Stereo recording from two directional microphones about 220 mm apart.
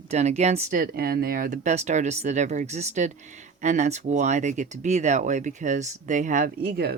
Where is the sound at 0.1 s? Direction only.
30° right (ahead or behind).